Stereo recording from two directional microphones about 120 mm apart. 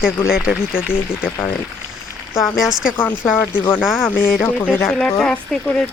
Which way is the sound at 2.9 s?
15° left (ahead or behind).